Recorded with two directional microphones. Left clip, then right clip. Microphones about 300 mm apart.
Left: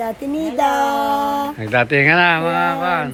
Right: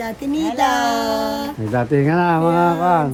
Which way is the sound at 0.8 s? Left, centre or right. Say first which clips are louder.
Left 2 dB; centre.